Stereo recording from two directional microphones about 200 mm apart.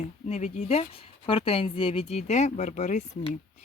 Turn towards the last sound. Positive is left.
turn(degrees=35)  # may be behind; listen again after turning